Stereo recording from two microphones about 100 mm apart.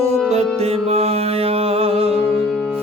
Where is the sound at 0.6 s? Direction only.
90° right.